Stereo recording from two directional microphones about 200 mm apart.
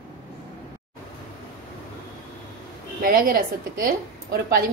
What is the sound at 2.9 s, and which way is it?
Speech, 45° right (ahead or behind).